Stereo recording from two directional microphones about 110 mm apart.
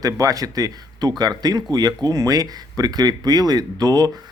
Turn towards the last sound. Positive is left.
turn(degrees=-35)  # may be behind; listen again after turning